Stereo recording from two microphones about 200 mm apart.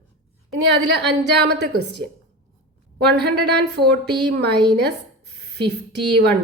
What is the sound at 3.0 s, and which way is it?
Speech, 55° right (ahead or behind).